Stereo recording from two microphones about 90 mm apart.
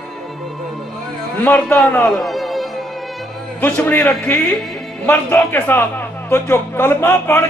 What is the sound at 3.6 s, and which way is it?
A man's voice, 20° left (ahead or behind).